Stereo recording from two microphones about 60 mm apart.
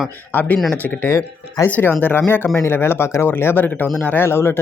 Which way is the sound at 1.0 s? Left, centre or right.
Left.